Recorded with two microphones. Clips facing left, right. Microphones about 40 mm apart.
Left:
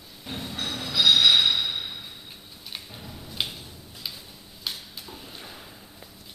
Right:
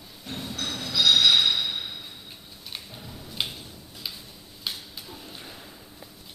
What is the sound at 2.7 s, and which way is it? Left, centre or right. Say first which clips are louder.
Tick-tock: even; centre.